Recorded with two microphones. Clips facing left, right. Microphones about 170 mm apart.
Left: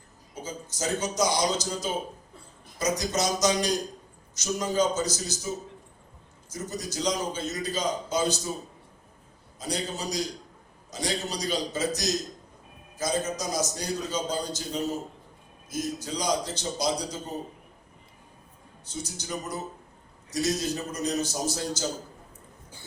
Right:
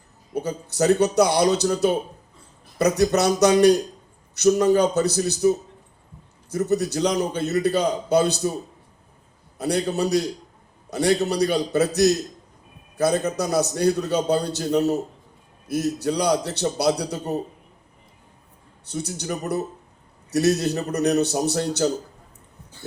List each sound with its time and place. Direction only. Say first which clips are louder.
0.3 s a man's voice: right 11 dB; 65° right (ahead or behind)
9.6 s a man's voice: right 10 dB; 65° right (ahead or behind)
18.9 s a man's voice: right 7 dB; 65° right (ahead or behind)